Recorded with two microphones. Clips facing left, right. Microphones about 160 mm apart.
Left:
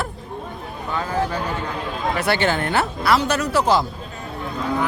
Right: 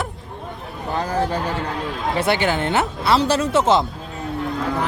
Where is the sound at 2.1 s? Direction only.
25° right (ahead or behind).